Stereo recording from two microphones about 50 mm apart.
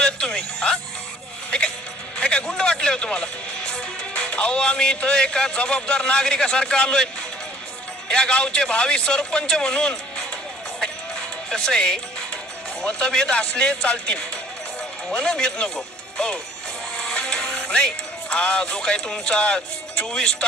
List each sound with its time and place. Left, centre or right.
0.0 s music: centre
2.2 s a sound: centre
3.7 s music: centre
8.0 s a man's voice: centre
11.4 s speech: centre
13.0 s a man's voice: centre
17.0 s music: centre
17.7 s speech: centre